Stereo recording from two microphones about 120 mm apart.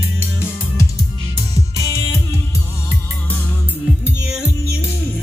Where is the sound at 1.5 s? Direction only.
25° left (ahead or behind).